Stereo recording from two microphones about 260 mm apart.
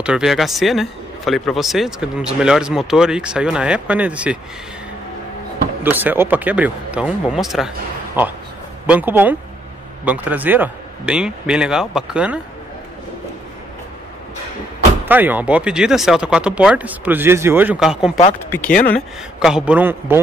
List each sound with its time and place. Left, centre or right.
0.0 s a man's voice: centre
5.9 s a man's voice: centre
8.8 s a man's voice: centre
15.0 s a man's voice: centre
18.7 s speech: left
18.9 s a man's voice: centre